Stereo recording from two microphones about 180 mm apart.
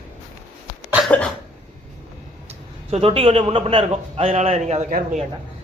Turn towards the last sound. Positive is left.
turn(degrees=-45)  # may be behind; listen again after turning